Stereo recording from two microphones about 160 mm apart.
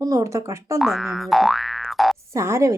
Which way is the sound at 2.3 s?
20° right (ahead or behind).